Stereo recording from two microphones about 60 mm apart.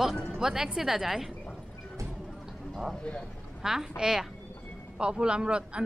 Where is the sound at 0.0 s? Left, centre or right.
Centre.